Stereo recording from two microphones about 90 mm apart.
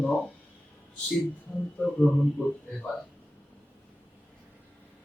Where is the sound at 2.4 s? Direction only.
20° left (ahead or behind).